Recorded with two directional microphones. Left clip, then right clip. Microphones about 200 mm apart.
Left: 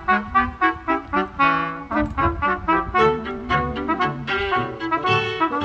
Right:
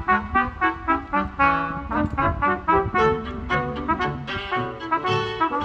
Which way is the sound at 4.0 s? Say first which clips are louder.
Left 5 dB; 10° left (ahead or behind).